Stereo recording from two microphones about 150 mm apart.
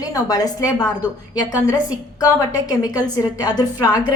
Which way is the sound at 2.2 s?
25° left (ahead or behind).